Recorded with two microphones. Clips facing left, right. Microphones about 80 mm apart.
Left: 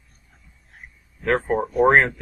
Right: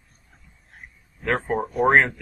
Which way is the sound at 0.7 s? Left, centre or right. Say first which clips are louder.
Even; centre.